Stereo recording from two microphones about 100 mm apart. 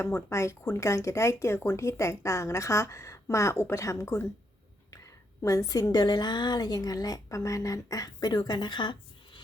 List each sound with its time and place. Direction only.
0.0 s a woman's voice: 25° left (ahead or behind)
5.4 s a woman's voice: 35° left (ahead or behind); by 9.0 s 50° left (ahead or behind)